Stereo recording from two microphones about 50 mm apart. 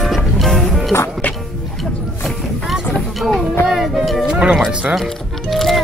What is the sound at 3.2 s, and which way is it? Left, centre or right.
Speech, centre.